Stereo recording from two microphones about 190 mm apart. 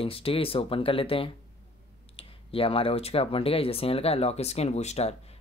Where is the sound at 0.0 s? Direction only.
30° left (ahead or behind).